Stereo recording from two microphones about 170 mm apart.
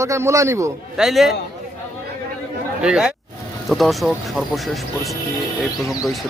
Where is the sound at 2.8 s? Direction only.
5° right (ahead or behind).